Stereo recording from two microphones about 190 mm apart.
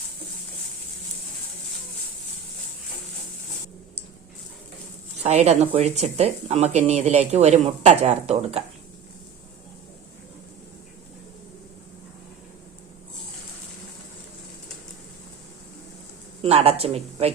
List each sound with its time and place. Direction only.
5.2 s speech: 35° right (ahead or behind)
16.4 s speech: 30° right (ahead or behind)